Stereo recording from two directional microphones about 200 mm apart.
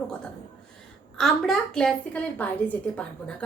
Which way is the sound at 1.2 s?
5° left (ahead or behind).